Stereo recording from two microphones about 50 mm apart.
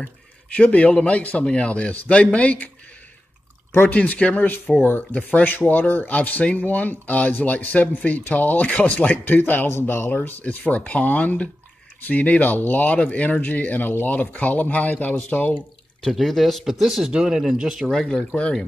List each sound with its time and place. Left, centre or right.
0.6 s a man's voice: left
3.9 s a man's voice: left
4.7 s speech: centre
5.1 s speech: left
9.7 s speech: left
10.4 s speech: left
16.0 s speech: centre
16.3 s speech: centre
18.0 s speech: centre